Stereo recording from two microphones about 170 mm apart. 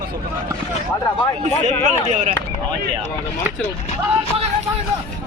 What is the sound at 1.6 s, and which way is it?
Speech, 45° right (ahead or behind).